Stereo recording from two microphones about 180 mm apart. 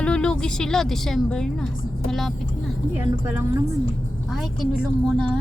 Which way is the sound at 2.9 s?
10° right (ahead or behind).